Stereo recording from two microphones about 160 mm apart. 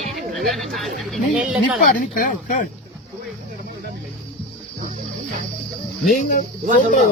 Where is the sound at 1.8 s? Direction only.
60° left (ahead or behind).